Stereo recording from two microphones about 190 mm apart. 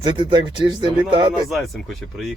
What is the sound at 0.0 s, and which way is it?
Speech, 25° right (ahead or behind).